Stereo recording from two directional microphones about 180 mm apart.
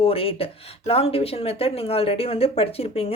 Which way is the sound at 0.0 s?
30° left (ahead or behind).